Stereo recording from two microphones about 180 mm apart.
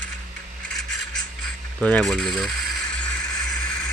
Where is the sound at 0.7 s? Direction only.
Centre (ahead or behind).